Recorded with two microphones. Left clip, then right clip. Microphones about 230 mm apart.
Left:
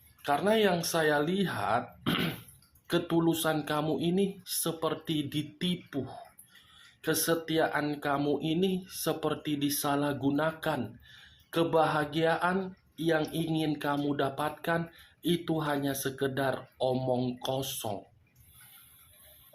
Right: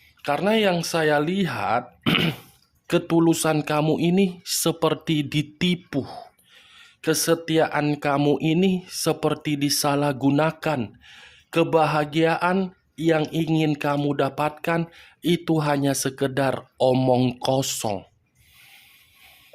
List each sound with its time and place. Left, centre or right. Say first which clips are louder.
0.2 s speech: right 5 dB; right